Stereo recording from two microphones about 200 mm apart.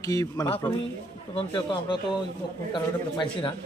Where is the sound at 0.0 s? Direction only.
15° left (ahead or behind).